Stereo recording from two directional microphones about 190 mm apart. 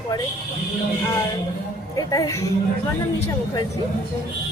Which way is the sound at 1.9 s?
20° left (ahead or behind).